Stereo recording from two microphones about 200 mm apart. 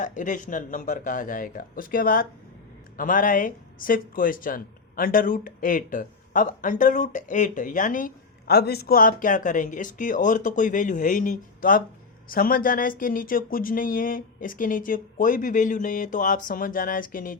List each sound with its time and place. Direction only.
0.0 s speech: 40° left (ahead or behind)